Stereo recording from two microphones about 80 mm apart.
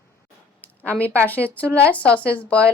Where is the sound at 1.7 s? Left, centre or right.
Centre.